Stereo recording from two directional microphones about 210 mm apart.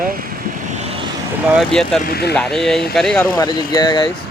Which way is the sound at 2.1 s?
50° left (ahead or behind).